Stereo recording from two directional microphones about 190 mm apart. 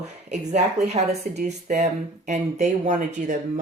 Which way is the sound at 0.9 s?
35° right (ahead or behind).